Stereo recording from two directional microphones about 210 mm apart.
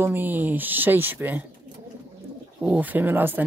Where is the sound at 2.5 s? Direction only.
10° right (ahead or behind).